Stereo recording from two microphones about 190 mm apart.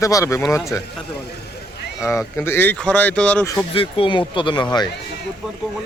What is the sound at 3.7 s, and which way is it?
Speech, 30° left (ahead or behind).